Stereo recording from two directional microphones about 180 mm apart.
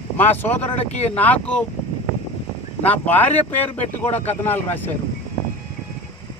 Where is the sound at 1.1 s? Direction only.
10° left (ahead or behind).